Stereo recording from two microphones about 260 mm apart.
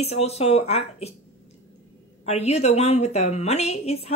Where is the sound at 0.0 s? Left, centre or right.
Left.